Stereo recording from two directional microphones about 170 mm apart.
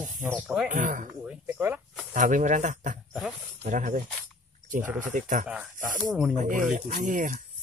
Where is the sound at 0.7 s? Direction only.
50° right (ahead or behind).